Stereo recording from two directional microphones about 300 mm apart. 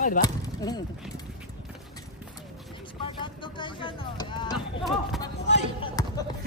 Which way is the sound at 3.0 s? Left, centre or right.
Centre.